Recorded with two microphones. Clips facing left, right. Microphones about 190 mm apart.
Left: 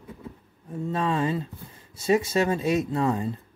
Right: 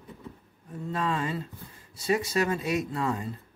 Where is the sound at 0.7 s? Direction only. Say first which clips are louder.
Left 4 dB; 25° left (ahead or behind).